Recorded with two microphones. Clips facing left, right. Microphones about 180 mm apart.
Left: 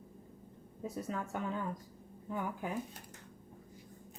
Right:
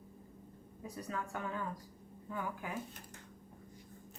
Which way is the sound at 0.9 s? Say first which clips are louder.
Left 3 dB; 20° left (ahead or behind).